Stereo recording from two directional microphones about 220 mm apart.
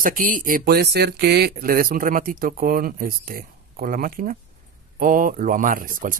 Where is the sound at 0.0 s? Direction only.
40° right (ahead or behind).